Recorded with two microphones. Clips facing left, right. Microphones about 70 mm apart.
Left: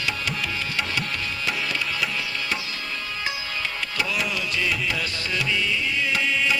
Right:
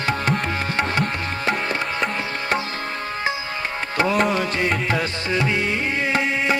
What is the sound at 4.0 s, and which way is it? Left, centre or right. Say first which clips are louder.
Music: right 9 dB; right.